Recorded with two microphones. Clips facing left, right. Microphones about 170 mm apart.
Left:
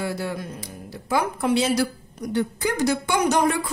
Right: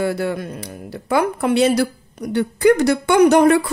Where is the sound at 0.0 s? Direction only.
60° right (ahead or behind).